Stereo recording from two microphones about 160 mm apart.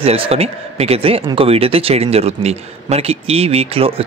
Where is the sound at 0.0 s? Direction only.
40° right (ahead or behind).